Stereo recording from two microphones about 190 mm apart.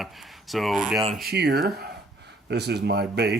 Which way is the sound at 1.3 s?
60° right (ahead or behind).